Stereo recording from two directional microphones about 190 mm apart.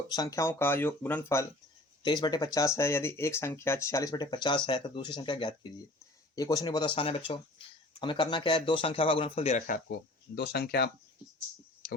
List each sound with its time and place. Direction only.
0.1 s speech: 20° left (ahead or behind)
2.0 s speech: 25° left (ahead or behind); by 9.8 s 45° left (ahead or behind)
10.3 s speech: 55° left (ahead or behind)